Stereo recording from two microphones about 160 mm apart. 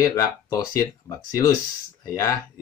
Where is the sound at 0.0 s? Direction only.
20° left (ahead or behind).